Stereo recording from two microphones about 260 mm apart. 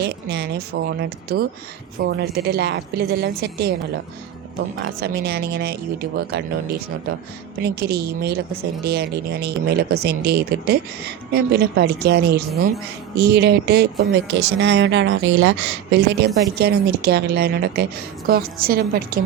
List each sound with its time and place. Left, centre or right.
0.0 s speech: right
4.8 s speech: right